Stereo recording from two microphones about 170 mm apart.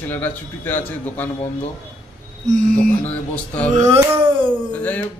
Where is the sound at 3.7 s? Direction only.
40° right (ahead or behind).